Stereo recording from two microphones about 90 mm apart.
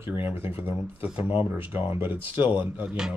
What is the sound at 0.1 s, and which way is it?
Speech, 25° right (ahead or behind).